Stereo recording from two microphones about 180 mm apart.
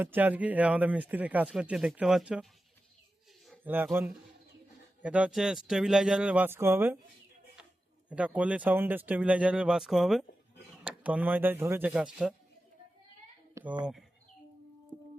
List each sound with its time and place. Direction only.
0.0 s speech: 10° right (ahead or behind)
3.6 s speech: 10° right (ahead or behind)
5.0 s speech: 5° right (ahead or behind)
8.1 s speech: 5° right (ahead or behind)
13.5 s speech: 15° right (ahead or behind)